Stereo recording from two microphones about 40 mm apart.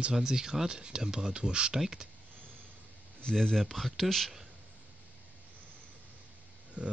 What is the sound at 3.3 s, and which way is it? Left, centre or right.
Speech, centre.